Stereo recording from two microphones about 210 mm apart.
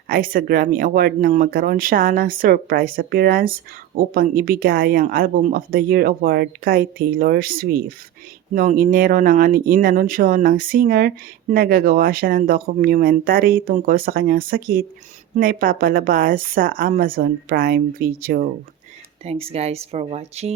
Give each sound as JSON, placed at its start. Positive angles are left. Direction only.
{"t": 0.1, "sound": "speech", "side_deg": -40}
{"t": 19.2, "sound": "speech", "side_deg": -30}